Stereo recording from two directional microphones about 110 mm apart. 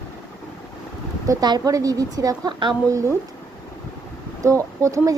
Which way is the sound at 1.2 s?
35° right (ahead or behind).